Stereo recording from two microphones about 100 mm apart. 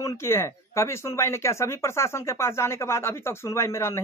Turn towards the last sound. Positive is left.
turn(degrees=30)  # may be behind; listen again after turning